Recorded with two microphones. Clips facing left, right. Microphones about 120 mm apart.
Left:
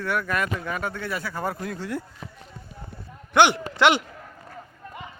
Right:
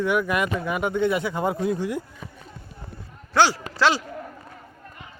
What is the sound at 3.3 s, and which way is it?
Speech, 20° left (ahead or behind).